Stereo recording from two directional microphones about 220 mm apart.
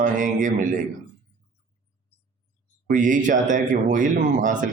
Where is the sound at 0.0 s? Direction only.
35° right (ahead or behind).